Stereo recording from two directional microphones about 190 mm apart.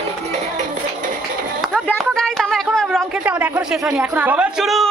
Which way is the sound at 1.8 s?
5° left (ahead or behind).